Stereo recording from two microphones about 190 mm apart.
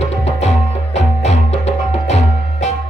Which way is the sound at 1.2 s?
35° left (ahead or behind).